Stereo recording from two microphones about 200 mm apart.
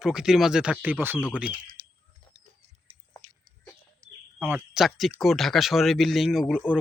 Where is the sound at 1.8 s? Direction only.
25° right (ahead or behind).